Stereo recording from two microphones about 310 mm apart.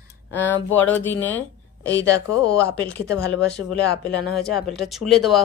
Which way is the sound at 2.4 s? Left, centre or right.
Centre.